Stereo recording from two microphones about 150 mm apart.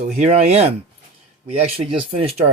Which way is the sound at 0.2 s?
45° right (ahead or behind).